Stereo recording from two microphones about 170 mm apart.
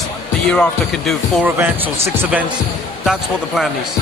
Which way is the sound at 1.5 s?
10° right (ahead or behind).